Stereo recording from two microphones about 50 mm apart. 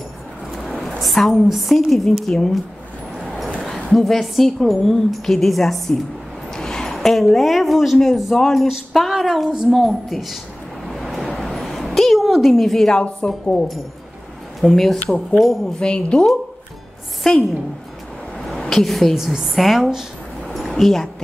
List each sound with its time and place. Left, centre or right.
0.6 s a woman's voice: centre
3.6 s a woman's voice: centre
10.9 s a sound: centre
13.2 s speech: centre
14.6 s a woman's voice: centre
15.8 s speech: centre
17.2 s a woman's voice: centre
18.4 s a sound: centre
19.1 s a woman's voice: centre
20.5 s a sound: centre